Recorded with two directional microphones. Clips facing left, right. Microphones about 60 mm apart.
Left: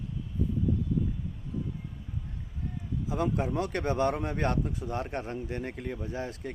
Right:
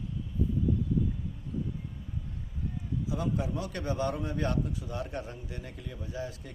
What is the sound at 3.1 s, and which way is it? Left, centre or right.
A man's voice, left.